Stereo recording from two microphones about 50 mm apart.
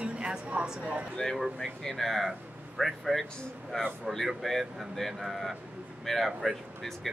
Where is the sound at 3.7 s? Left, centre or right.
Centre.